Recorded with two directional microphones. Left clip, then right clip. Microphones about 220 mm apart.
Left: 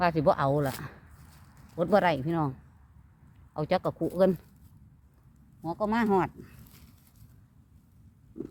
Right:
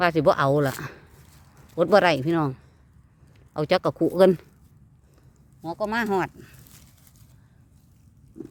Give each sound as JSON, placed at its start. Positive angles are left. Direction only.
{"t": 0.0, "sound": "speech", "side_deg": -40}
{"t": 1.7, "sound": "speech", "side_deg": -50}
{"t": 5.6, "sound": "speech", "side_deg": -40}